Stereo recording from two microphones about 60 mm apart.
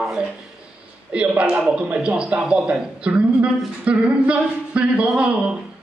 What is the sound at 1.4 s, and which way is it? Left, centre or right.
A man's voice, centre.